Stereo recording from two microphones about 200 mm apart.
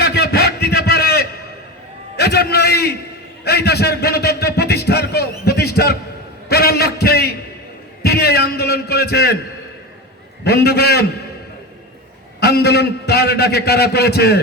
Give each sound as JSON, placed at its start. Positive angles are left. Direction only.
{"t": 0.0, "sound": "a sound", "side_deg": 55}
{"t": 2.1, "sound": "a man's voice", "side_deg": 55}
{"t": 10.4, "sound": "a man's voice", "side_deg": 55}
{"t": 12.4, "sound": "a man's voice", "side_deg": 55}